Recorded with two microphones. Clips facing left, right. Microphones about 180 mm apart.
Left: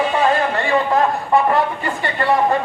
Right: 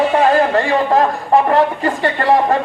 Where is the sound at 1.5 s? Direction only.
45° right (ahead or behind).